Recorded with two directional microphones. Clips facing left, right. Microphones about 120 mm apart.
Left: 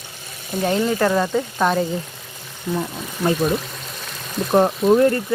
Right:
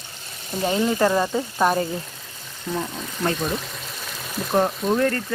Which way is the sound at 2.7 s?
10° left (ahead or behind).